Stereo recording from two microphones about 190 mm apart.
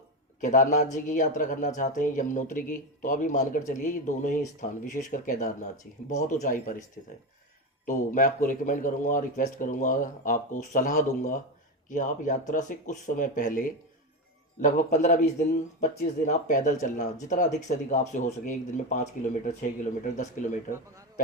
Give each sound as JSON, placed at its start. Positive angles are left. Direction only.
{"t": 0.4, "sound": "speech", "side_deg": 40}
{"t": 7.9, "sound": "speech", "side_deg": 45}